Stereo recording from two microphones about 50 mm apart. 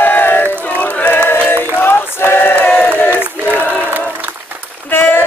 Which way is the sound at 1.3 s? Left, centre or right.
Left.